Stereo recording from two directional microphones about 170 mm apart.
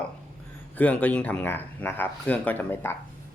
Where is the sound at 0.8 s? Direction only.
10° left (ahead or behind).